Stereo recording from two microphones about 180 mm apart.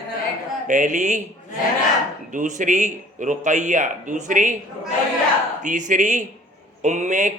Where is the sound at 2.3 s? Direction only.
45° right (ahead or behind).